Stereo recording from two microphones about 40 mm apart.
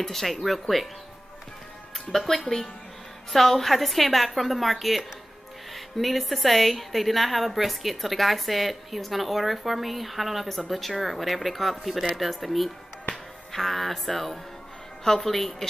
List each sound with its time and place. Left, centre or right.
0.0 s a woman's voice: centre
2.0 s a woman's voice: centre